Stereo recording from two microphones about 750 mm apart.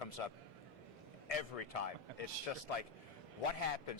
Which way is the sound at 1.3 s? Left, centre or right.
Left.